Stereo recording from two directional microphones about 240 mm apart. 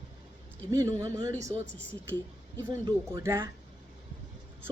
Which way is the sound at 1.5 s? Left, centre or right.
Right.